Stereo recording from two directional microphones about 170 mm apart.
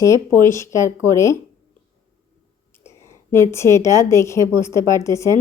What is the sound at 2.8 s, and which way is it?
A woman's voice, 15° left (ahead or behind).